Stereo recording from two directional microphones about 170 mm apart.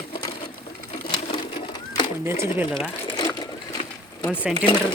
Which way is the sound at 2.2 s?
15° right (ahead or behind).